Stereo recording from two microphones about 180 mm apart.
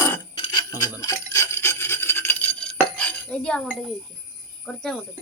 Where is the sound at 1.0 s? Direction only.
15° left (ahead or behind).